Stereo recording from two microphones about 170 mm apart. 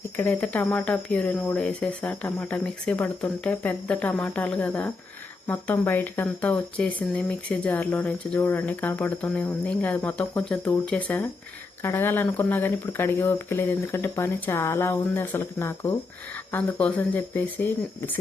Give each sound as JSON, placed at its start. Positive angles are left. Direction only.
{"t": 0.2, "sound": "speech", "side_deg": 10}